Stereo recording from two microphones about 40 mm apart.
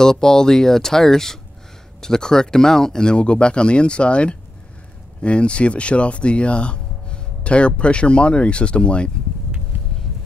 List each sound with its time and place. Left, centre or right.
0.0 s speech: centre